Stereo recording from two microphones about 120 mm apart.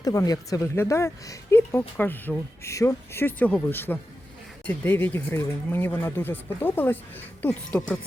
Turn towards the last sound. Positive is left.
turn(degrees=10)  # may be behind; listen again after turning